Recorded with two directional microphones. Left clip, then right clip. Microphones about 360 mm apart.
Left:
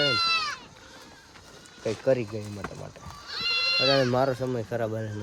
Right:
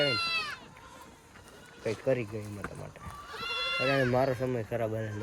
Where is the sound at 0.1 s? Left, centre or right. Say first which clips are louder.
Left 6 dB; left.